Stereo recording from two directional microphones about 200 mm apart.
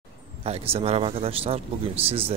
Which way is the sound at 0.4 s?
30° right (ahead or behind).